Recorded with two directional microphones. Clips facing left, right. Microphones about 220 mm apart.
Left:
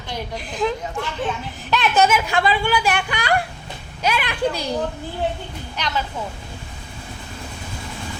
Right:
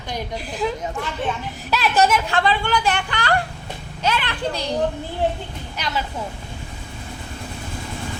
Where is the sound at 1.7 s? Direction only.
Centre (ahead or behind).